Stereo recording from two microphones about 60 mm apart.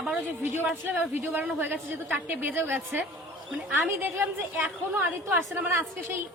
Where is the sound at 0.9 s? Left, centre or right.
Right.